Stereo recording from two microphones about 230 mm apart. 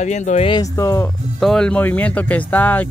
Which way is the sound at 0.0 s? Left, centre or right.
Left.